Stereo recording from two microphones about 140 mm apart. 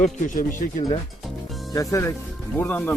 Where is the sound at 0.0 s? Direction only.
75° left (ahead or behind).